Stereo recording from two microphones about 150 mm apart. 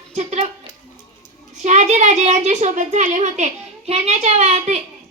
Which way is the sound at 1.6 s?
50° right (ahead or behind).